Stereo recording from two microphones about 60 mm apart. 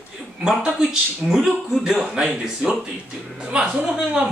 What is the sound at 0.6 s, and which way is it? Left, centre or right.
A man's voice, centre.